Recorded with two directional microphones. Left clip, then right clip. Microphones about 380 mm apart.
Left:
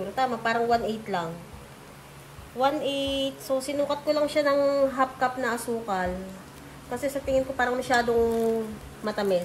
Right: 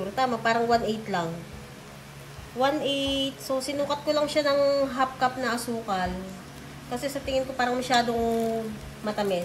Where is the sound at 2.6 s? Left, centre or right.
Centre.